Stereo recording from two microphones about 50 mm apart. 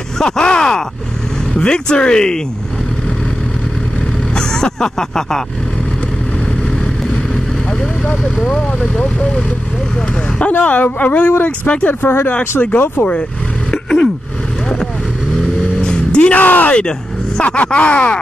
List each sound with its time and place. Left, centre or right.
0.2 s speech: centre
4.4 s speech: centre
8.5 s speech: left
10.4 s speech: left
11.9 s speech: left
13.7 s a sound: centre
15.8 s music: centre; by 16.7 s left
17.4 s speech: left